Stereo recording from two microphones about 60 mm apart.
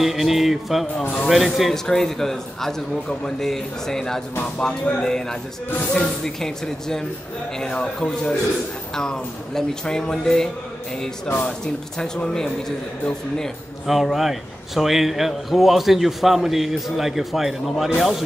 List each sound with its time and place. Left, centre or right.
0.0 s a man's voice: centre
13.8 s a man's voice: centre